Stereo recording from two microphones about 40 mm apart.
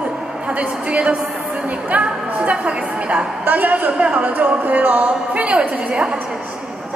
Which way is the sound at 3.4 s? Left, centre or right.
Right.